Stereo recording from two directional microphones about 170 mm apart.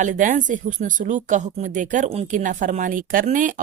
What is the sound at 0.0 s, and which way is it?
Speech, 50° right (ahead or behind).